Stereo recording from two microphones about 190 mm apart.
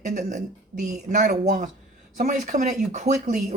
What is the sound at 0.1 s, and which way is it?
Speech, 40° right (ahead or behind).